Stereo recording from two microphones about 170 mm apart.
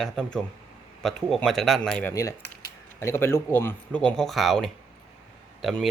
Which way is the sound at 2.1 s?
20° left (ahead or behind).